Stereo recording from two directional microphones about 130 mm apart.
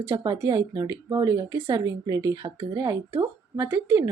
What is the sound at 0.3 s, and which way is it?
Speech, 25° right (ahead or behind).